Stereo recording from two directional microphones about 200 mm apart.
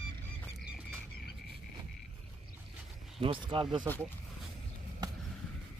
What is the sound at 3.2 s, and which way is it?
Speech, 25° right (ahead or behind).